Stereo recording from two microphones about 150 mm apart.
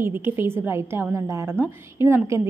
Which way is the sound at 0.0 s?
15° right (ahead or behind).